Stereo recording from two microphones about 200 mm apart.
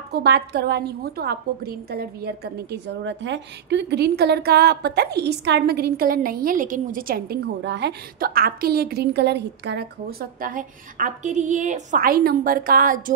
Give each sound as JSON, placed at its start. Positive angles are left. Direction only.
{"t": 0.1, "sound": "a woman's voice", "side_deg": -55}